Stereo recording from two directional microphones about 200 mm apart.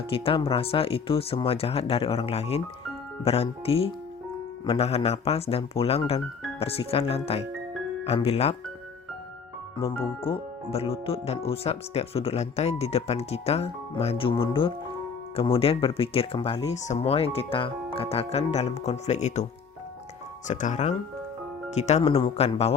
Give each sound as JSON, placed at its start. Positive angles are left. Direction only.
{"t": 0.1, "sound": "speech", "side_deg": 25}
{"t": 10.2, "sound": "speech", "side_deg": 25}
{"t": 20.5, "sound": "speech", "side_deg": 35}